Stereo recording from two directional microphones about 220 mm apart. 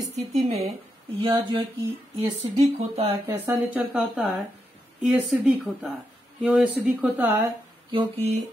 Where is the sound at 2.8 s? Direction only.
25° right (ahead or behind).